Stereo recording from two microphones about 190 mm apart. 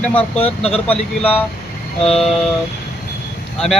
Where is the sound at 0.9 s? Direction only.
10° left (ahead or behind).